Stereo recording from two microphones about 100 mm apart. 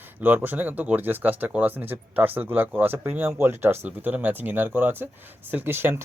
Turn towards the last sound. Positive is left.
turn(degrees=-25)  # may be behind; listen again after turning